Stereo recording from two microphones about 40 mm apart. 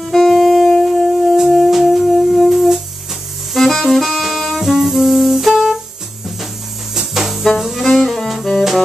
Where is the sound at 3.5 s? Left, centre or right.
Centre.